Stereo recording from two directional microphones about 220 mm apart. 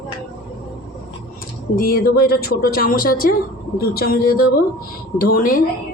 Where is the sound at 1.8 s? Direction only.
45° left (ahead or behind).